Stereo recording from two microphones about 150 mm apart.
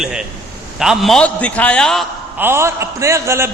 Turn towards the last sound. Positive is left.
turn(degrees=-20)  # may be behind; listen again after turning